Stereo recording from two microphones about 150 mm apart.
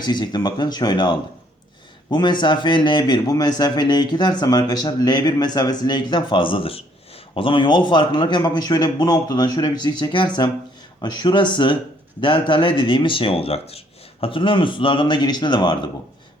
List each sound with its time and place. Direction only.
0.0 s a man's voice: 30° left (ahead or behind)